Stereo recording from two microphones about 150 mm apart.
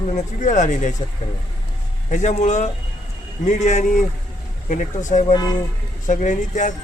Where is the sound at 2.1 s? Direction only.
55° left (ahead or behind).